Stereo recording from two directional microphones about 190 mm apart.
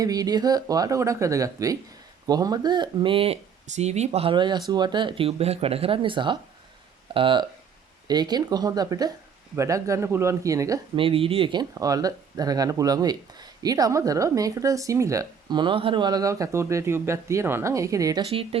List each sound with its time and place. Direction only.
0.0 s speech: 20° right (ahead or behind)
11.0 s speech: 30° right (ahead or behind)